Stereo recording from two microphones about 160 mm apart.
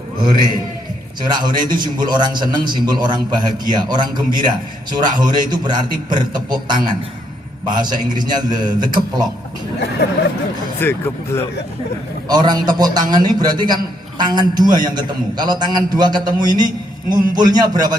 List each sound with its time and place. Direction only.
1.2 s a man's voice: 25° right (ahead or behind)
10.8 s speech: 15° left (ahead or behind)
12.3 s a man's voice: 25° right (ahead or behind)